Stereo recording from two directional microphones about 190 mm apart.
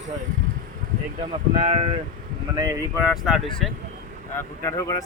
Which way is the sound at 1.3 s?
30° right (ahead or behind).